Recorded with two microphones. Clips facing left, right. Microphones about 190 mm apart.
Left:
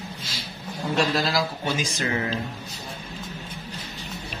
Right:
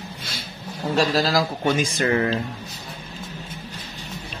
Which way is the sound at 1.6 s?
55° right (ahead or behind).